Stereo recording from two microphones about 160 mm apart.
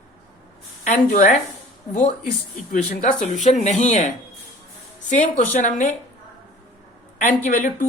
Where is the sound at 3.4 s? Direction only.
45° left (ahead or behind).